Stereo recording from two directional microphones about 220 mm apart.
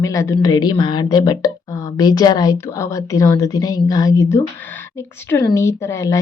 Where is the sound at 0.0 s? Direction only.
15° left (ahead or behind).